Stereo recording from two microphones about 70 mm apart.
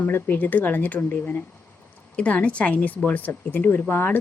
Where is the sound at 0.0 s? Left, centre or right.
Left.